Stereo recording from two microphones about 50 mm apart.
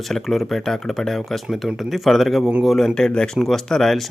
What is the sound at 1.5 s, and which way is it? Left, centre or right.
Speech, centre.